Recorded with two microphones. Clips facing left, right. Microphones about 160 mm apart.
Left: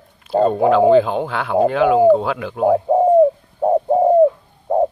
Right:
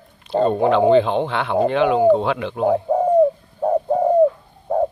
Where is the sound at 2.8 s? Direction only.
25° left (ahead or behind).